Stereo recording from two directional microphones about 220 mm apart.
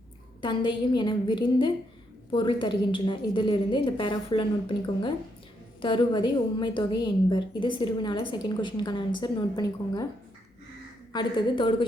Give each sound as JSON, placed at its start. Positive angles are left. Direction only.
{"t": 0.4, "sound": "a woman's voice", "side_deg": 20}
{"t": 11.1, "sound": "a woman's voice", "side_deg": 20}